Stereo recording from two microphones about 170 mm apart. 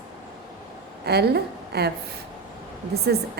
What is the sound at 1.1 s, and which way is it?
Speech, 70° right (ahead or behind).